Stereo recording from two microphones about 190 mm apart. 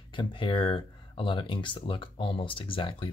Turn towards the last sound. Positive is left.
turn(degrees=25)  # may be behind; listen again after turning